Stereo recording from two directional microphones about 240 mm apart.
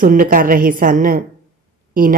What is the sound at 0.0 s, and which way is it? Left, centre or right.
Speech, right.